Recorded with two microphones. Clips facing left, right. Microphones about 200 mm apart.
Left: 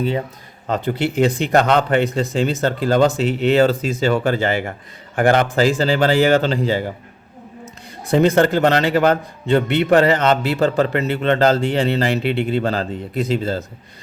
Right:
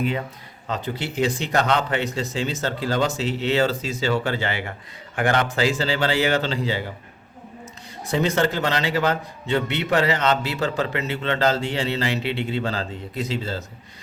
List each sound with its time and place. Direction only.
0.7 s speech: 55° left (ahead or behind)